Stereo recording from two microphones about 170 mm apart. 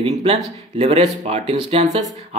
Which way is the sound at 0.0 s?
40° right (ahead or behind).